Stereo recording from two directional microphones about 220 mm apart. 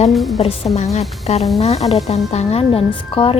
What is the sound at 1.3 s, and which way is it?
A woman's voice, 30° left (ahead or behind).